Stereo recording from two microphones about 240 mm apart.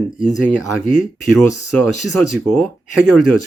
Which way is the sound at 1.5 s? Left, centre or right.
Right.